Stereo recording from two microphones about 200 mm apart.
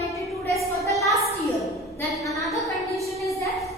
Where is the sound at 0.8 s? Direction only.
15° left (ahead or behind).